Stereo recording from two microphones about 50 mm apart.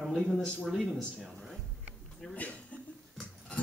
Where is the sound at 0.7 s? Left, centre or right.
Centre.